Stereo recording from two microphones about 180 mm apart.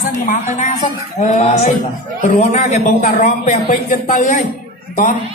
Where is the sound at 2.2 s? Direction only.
40° left (ahead or behind).